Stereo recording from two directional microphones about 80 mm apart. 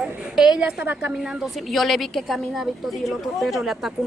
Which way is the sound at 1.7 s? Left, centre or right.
Centre.